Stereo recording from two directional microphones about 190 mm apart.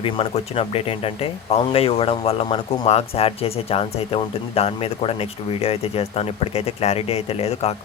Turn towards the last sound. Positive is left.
turn(degrees=35)  # may be behind; listen again after turning